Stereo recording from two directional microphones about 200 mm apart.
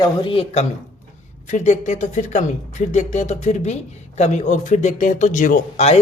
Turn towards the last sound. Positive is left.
turn(degrees=35)  # may be behind; listen again after turning